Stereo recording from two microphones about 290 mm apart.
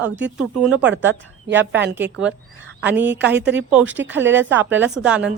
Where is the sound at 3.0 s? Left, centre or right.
Centre.